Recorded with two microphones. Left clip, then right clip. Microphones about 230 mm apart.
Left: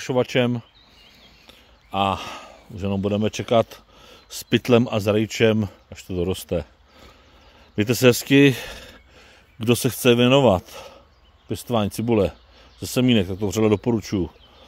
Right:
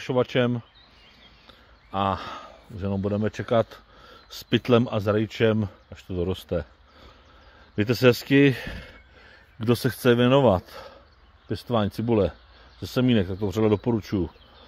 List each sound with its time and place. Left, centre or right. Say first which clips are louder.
0.0 s speech: left 2 dB; centre